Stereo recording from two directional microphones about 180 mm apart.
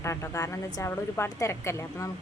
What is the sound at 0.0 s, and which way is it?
Speech, 15° left (ahead or behind).